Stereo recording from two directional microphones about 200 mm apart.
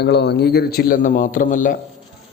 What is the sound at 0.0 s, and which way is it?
A man's voice, 55° left (ahead or behind).